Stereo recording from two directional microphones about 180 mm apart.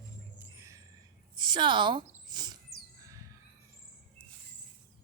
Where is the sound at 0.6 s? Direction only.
15° right (ahead or behind).